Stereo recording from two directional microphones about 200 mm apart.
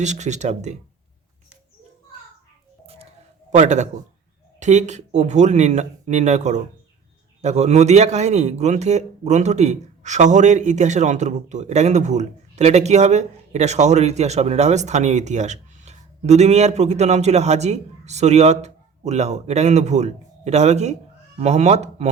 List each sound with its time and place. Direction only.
0.0 s a man's voice: 35° right (ahead or behind)
2.8 s music: 30° right (ahead or behind)
3.5 s a man's voice: 35° right (ahead or behind)